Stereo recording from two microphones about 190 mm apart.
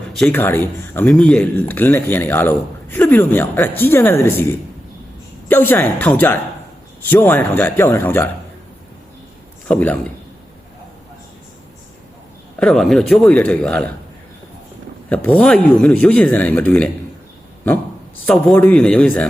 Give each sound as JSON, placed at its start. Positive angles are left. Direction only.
{"t": 0.1, "sound": "speech", "side_deg": 5}
{"t": 9.6, "sound": "speech", "side_deg": 10}
{"t": 12.5, "sound": "a man's voice", "side_deg": 0}
{"t": 15.1, "sound": "speech", "side_deg": 5}
{"t": 18.3, "sound": "a man's voice", "side_deg": 0}